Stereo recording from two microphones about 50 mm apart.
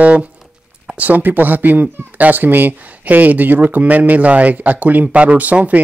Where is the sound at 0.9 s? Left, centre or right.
Right.